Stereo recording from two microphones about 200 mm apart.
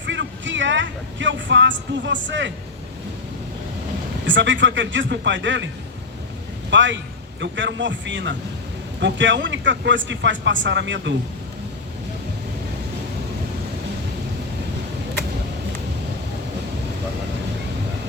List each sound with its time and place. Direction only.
0.0 s a sound: 65° right (ahead or behind)
4.3 s speech: 65° right (ahead or behind)
6.7 s a man's voice: 70° right (ahead or behind)